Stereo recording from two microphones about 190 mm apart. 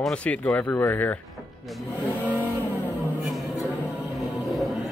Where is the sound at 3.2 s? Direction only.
Centre (ahead or behind).